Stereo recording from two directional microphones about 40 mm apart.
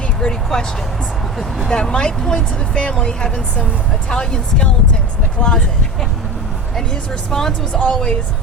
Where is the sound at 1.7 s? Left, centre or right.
Left.